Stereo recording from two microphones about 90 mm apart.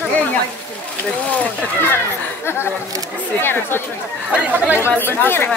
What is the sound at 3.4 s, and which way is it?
Speech, 25° left (ahead or behind).